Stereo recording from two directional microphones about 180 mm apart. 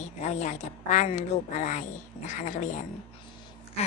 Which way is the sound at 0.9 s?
40° left (ahead or behind).